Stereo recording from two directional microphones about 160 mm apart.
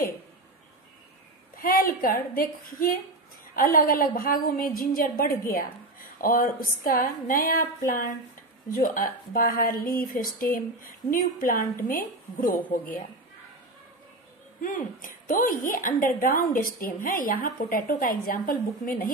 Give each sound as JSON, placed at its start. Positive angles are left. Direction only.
{"t": 1.6, "sound": "a woman's voice", "side_deg": 60}
{"t": 14.6, "sound": "a woman's voice", "side_deg": 55}